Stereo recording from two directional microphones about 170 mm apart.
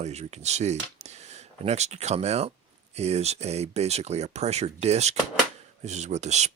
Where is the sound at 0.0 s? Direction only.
40° right (ahead or behind).